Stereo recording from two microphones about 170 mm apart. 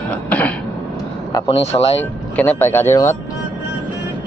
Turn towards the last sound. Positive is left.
turn(degrees=15)  # may be behind; listen again after turning